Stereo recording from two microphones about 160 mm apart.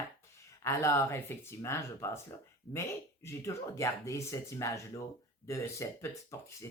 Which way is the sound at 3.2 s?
20° left (ahead or behind).